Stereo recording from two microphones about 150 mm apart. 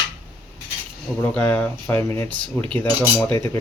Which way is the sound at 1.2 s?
10° left (ahead or behind).